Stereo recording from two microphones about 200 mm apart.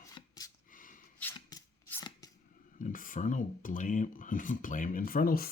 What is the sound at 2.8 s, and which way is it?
Speech, 40° left (ahead or behind).